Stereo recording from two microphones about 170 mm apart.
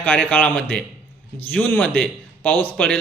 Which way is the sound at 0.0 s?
10° left (ahead or behind).